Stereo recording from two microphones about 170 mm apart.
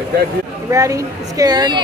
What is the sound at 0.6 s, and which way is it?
A woman's voice, 20° right (ahead or behind).